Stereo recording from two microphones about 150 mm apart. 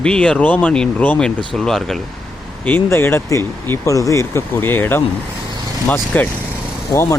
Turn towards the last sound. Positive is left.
turn(degrees=20)  # may be behind; listen again after turning